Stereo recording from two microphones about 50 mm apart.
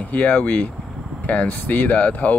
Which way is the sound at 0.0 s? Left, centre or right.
Left.